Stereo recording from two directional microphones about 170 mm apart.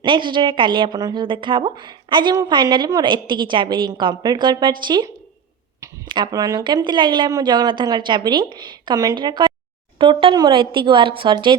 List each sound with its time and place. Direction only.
0.0 s a woman's voice: 30° right (ahead or behind)